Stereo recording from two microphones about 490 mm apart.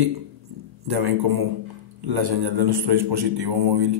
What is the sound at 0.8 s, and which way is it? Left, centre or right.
A man's voice, right.